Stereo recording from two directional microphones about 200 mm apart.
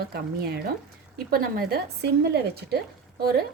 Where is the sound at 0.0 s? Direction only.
50° right (ahead or behind).